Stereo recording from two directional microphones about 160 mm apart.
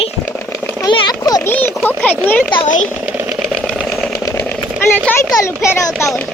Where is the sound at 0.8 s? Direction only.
25° left (ahead or behind).